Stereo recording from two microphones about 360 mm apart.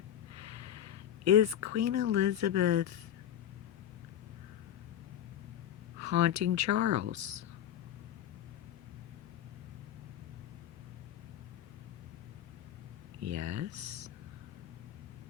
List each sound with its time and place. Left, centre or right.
0.3 s speech: right
6.0 s speech: right
13.2 s speech: right